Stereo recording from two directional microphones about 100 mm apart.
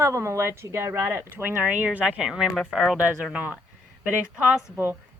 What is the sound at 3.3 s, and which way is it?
Speech, 15° right (ahead or behind).